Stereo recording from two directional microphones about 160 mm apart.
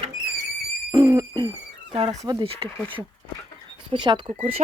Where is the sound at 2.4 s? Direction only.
35° right (ahead or behind).